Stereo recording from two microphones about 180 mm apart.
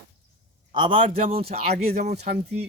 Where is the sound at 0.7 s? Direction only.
30° right (ahead or behind).